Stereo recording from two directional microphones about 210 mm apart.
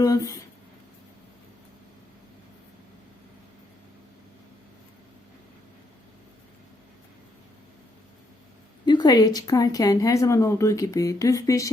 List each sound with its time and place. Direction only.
0.0 s speech: 15° left (ahead or behind)
8.9 s speech: 20° left (ahead or behind)